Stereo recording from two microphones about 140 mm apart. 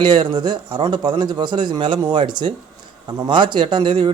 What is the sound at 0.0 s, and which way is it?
A man's voice, 35° right (ahead or behind).